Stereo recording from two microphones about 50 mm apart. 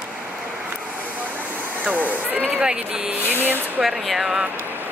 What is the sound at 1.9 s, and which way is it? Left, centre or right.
Speech, right.